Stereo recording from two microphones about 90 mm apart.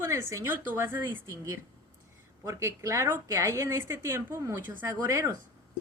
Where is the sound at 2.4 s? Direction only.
30° right (ahead or behind).